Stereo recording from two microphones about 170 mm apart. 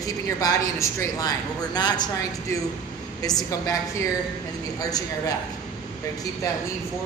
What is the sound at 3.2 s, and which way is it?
Speech, 20° left (ahead or behind).